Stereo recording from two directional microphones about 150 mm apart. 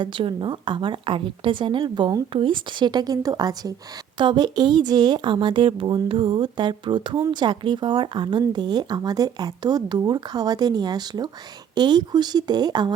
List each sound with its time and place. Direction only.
0.0 s a woman's voice: 35° right (ahead or behind)